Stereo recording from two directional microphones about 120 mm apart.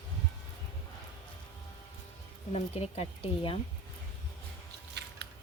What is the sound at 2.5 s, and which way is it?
Speech, 60° left (ahead or behind).